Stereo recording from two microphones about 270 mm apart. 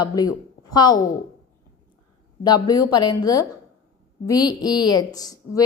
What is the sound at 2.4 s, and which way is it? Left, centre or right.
A woman's voice, centre.